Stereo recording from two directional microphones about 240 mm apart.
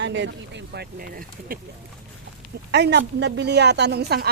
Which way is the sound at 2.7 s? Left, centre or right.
Right.